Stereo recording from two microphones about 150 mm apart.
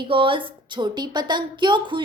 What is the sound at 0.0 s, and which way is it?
A woman's voice, 35° right (ahead or behind).